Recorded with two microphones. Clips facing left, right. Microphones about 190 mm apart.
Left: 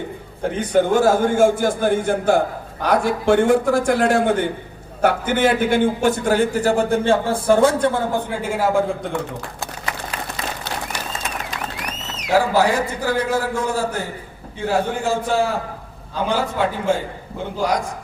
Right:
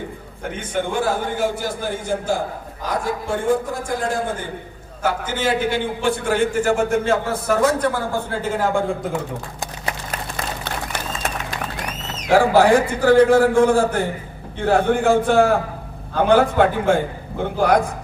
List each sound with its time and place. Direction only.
0.4 s a man's voice: 35° left (ahead or behind); by 2.4 s 60° left (ahead or behind)
2.8 s a man's voice: 70° left (ahead or behind)
5.0 s a man's voice: 60° left (ahead or behind); by 8.2 s 25° left (ahead or behind)
8.3 s a man's voice: 10° left (ahead or behind)
11.9 s a sound: 70° left (ahead or behind)
12.3 s a man's voice: 55° right (ahead or behind)